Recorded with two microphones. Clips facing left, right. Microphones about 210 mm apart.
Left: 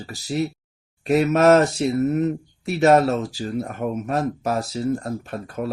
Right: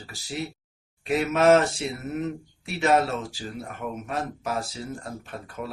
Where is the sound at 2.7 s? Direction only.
40° left (ahead or behind).